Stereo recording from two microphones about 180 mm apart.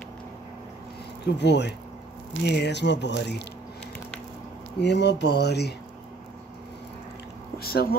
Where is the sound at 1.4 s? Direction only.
70° left (ahead or behind).